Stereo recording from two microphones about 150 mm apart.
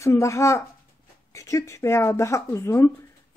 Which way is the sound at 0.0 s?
20° left (ahead or behind).